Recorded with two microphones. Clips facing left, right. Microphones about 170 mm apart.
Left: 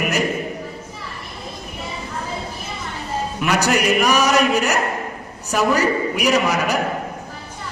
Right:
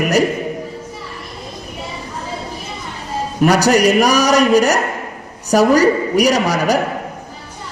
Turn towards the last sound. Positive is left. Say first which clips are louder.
# right 3 dB
turn(degrees=-40)  # may be behind; listen again after turning